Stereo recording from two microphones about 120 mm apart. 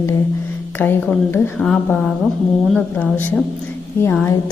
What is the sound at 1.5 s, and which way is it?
A woman's voice, 5° left (ahead or behind).